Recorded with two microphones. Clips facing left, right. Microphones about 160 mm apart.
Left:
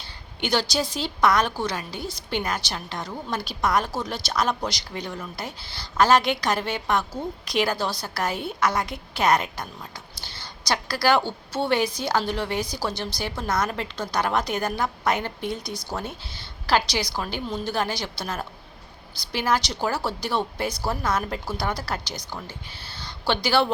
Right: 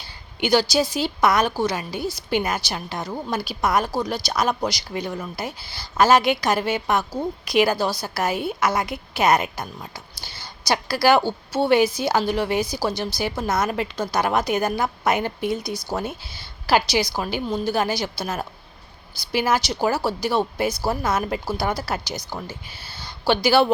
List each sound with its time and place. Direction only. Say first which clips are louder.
0.0 s a woman's voice: right 5 dB; 5° right (ahead or behind)